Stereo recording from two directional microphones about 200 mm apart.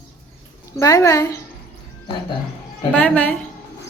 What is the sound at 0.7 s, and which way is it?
Speech, 15° left (ahead or behind).